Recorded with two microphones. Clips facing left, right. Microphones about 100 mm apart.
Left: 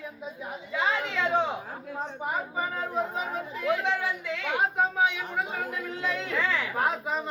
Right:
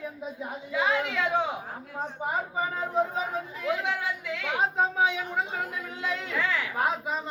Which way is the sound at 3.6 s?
15° right (ahead or behind).